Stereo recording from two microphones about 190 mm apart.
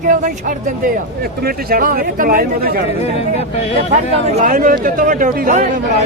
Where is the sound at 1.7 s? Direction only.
45° right (ahead or behind).